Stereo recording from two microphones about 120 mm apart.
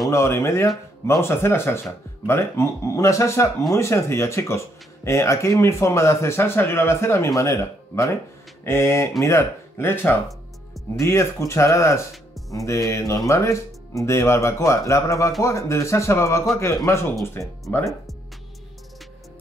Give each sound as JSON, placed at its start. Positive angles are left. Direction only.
{"t": 0.1, "sound": "speech", "side_deg": 25}